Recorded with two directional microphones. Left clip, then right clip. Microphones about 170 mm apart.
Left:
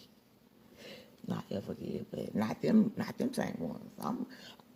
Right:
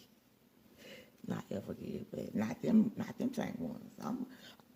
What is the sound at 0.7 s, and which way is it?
Pig, 5° left (ahead or behind).